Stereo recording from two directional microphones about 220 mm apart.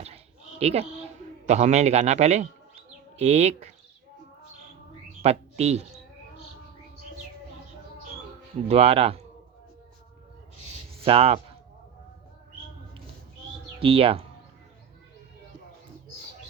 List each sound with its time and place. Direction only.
0.6 s a man's voice: 30° right (ahead or behind)
5.2 s speech: 30° right (ahead or behind)
8.6 s speech: 25° right (ahead or behind)
10.9 s speech: 25° right (ahead or behind)
13.7 s speech: 25° right (ahead or behind)